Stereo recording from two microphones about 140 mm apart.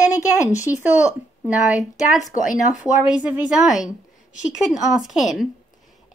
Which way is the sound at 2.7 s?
5° right (ahead or behind).